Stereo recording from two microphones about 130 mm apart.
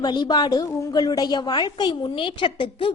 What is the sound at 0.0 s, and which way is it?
A woman's voice, 35° left (ahead or behind).